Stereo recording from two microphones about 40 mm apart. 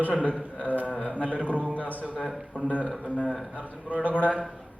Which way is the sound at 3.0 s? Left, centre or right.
Left.